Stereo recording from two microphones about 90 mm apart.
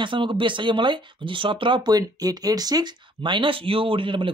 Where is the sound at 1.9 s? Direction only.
45° right (ahead or behind); by 4.2 s 70° right (ahead or behind).